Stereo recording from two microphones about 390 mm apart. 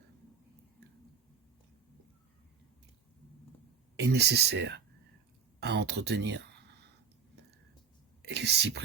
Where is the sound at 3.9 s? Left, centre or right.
Right.